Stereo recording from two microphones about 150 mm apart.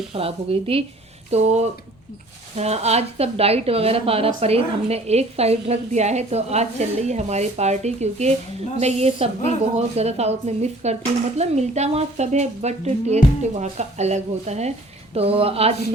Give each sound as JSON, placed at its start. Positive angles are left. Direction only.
{"t": 0.1, "sound": "speech", "side_deg": -40}